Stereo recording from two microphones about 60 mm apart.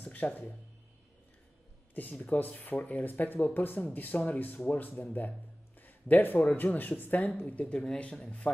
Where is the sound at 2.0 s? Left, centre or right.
Left.